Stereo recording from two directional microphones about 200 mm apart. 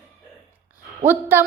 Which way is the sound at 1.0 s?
10° right (ahead or behind).